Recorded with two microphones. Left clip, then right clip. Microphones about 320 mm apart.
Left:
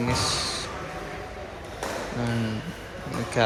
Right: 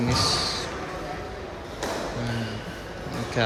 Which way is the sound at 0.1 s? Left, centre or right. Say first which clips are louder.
Right 4 dB; centre.